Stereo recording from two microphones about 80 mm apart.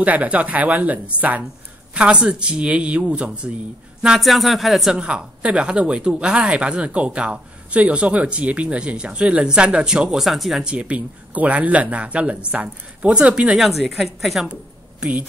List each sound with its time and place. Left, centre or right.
0.0 s a woman's voice: centre
10.7 s a woman's voice: centre
13.6 s a woman's voice: centre
14.5 s a sound: centre